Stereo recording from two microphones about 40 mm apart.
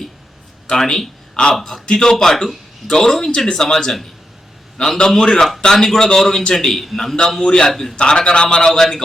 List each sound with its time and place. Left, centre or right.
0.7 s a man's voice: centre
4.9 s speech: centre
7.4 s a man's voice: centre
7.7 s a man's voice: centre
7.9 s a man's voice: left
8.7 s speech: centre